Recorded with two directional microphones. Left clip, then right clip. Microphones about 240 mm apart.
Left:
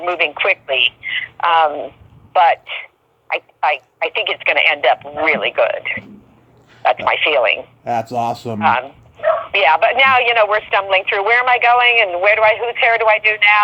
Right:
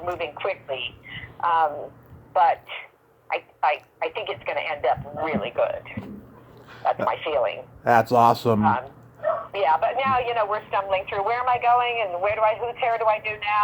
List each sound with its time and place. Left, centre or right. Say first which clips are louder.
0.0 s a woman's voice: left 11 dB; left
7.9 s speech: right 2 dB; centre
9.2 s speech: left 9 dB; left